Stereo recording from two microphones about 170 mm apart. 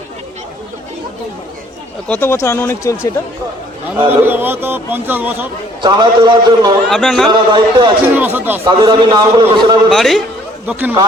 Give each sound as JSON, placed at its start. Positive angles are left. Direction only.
{"t": 2.0, "sound": "speech", "side_deg": 10}
{"t": 4.1, "sound": "a man's voice", "side_deg": -10}
{"t": 5.8, "sound": "a man's voice", "side_deg": -25}
{"t": 6.9, "sound": "a man's voice", "side_deg": 0}
{"t": 7.3, "sound": "a man's voice", "side_deg": -25}
{"t": 8.0, "sound": "a man's voice", "side_deg": -10}
{"t": 8.7, "sound": "a man's voice", "side_deg": -25}
{"t": 9.9, "sound": "a man's voice", "side_deg": 0}
{"t": 10.7, "sound": "a man's voice", "side_deg": -10}